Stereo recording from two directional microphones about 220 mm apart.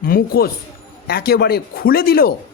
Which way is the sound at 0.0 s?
40° left (ahead or behind).